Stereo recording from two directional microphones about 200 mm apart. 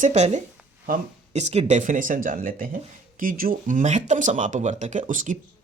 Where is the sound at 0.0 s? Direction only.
35° right (ahead or behind).